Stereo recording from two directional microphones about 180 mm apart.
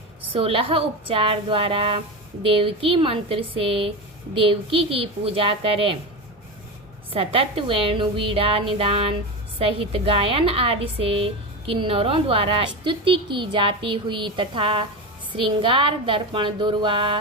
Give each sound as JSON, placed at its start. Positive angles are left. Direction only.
{"t": 0.3, "sound": "a woman's voice", "side_deg": -30}
{"t": 7.1, "sound": "a woman's voice", "side_deg": -30}